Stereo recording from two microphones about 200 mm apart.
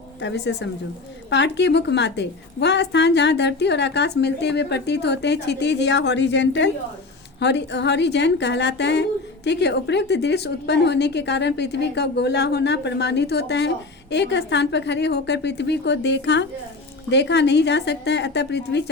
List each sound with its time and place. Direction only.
0.2 s a woman's voice: 60° left (ahead or behind)